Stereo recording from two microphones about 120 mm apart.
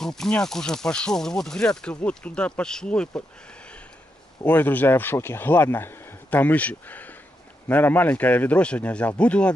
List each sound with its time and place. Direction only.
0.0 s speech: 5° left (ahead or behind)
4.5 s speech: 15° left (ahead or behind)